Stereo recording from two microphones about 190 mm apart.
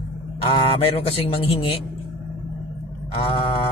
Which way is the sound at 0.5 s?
25° left (ahead or behind).